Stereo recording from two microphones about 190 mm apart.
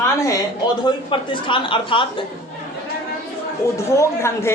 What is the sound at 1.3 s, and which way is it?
Speech, 25° left (ahead or behind).